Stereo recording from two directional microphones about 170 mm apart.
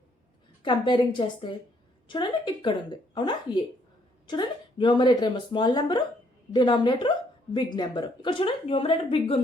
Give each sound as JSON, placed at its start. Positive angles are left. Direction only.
{"t": 0.6, "sound": "speech", "side_deg": 25}